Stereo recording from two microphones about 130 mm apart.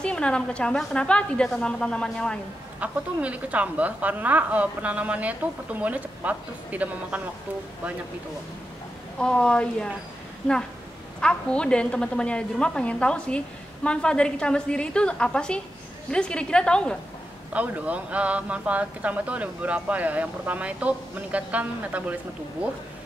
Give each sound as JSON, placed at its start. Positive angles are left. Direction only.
{"t": 0.0, "sound": "a woman's voice", "side_deg": 5}
{"t": 2.8, "sound": "speech", "side_deg": -10}
{"t": 9.2, "sound": "a woman's voice", "side_deg": 5}
{"t": 11.1, "sound": "a woman's voice", "side_deg": 5}
{"t": 17.5, "sound": "speech", "side_deg": -10}